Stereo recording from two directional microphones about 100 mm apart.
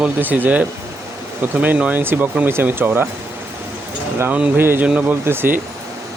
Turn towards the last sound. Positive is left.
turn(degrees=-20)  # may be behind; listen again after turning